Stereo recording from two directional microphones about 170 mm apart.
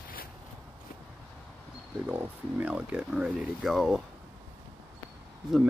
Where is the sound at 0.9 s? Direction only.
55° left (ahead or behind).